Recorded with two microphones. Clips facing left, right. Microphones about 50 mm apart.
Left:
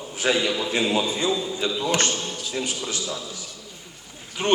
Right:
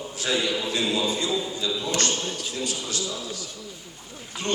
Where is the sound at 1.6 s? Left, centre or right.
Left.